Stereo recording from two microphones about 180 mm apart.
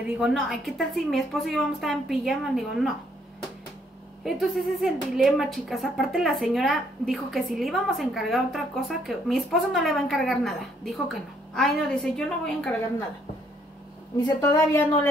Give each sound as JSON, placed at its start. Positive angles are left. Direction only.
{"t": 0.2, "sound": "speech", "side_deg": 0}
{"t": 4.2, "sound": "speech", "side_deg": 0}
{"t": 14.2, "sound": "speech", "side_deg": 20}